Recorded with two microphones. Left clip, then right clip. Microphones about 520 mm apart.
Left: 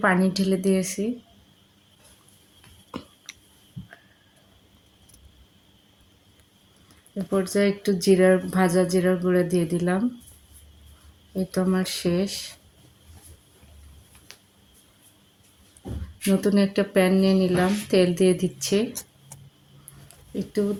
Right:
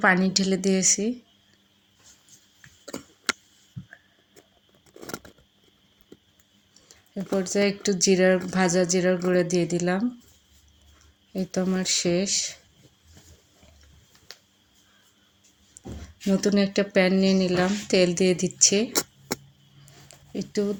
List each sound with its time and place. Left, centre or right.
0.0 s speech: left
7.3 s speech: left
11.3 s speech: left
14.3 s a sound: left
16.3 s speech: left
20.1 s a sound: left